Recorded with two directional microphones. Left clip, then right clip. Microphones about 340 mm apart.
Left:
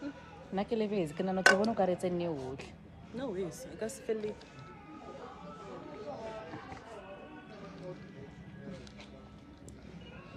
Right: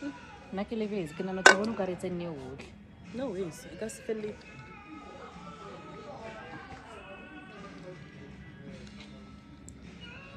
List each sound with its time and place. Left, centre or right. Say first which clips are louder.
0.6 s speech: left 1 dB; left
3.2 s speech: right 2 dB; centre